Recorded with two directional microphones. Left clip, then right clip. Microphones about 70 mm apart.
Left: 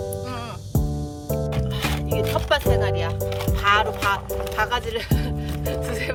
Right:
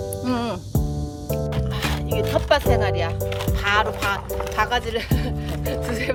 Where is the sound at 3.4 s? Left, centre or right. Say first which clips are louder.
Left 1 dB; centre.